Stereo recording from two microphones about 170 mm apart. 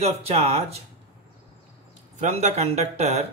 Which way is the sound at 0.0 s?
35° right (ahead or behind).